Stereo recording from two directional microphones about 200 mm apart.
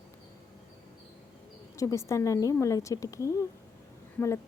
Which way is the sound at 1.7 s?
15° left (ahead or behind).